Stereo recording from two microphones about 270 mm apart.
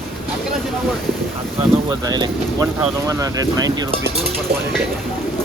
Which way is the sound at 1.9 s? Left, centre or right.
Centre.